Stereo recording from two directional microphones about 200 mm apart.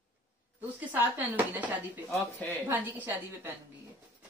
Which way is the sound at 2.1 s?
5° left (ahead or behind).